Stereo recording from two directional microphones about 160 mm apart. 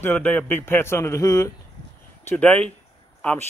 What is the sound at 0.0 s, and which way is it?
A man's voice, 10° left (ahead or behind).